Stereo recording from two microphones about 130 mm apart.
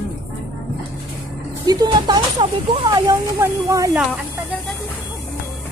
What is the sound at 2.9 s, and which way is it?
Speech, 25° right (ahead or behind).